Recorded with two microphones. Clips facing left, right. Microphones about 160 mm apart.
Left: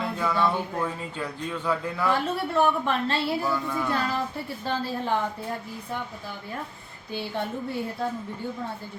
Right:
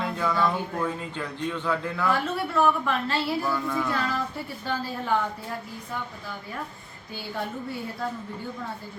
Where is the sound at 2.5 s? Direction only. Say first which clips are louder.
Even; 30° left (ahead or behind).